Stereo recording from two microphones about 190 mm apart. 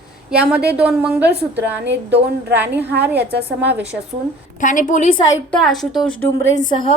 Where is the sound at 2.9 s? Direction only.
60° right (ahead or behind).